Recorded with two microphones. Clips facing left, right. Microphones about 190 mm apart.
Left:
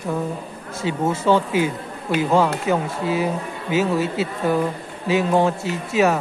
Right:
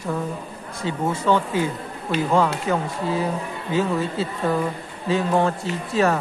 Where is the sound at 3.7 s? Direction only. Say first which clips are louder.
Left 2 dB; 90° left.